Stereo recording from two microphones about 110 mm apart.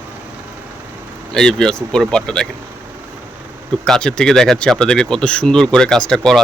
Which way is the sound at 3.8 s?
5° left (ahead or behind).